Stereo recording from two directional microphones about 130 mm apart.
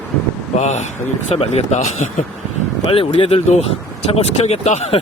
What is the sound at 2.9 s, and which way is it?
Speech, 45° left (ahead or behind).